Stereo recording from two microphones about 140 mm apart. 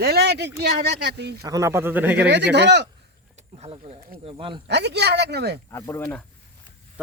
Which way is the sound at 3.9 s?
75° right (ahead or behind).